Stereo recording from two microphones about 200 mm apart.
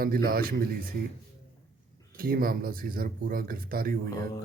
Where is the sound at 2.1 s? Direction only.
45° right (ahead or behind).